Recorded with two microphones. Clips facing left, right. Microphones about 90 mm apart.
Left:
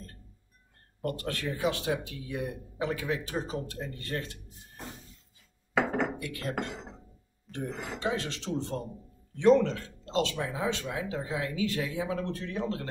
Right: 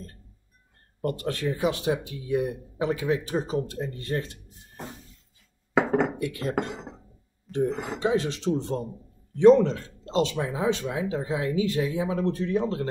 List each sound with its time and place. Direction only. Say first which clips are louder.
1.0 s speech: right 5 dB; 20° right (ahead or behind)
6.2 s speech: right 6 dB; 25° right (ahead or behind)